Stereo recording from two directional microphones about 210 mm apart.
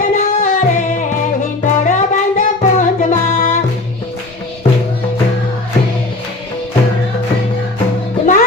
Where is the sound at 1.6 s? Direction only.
35° left (ahead or behind).